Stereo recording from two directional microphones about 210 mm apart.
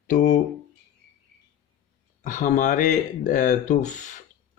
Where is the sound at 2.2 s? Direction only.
40° left (ahead or behind).